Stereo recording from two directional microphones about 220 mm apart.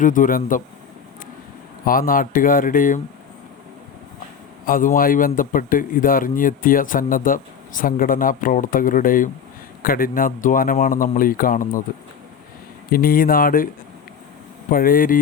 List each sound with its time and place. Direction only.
0.0 s a man's voice: 35° left (ahead or behind)
1.8 s a man's voice: 40° left (ahead or behind)
4.6 s a man's voice: 40° left (ahead or behind)
12.9 s a man's voice: 40° left (ahead or behind)
14.7 s a man's voice: 40° left (ahead or behind)